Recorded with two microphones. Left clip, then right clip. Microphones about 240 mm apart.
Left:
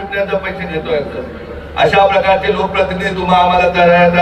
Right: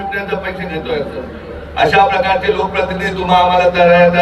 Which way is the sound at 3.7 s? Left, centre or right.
Left.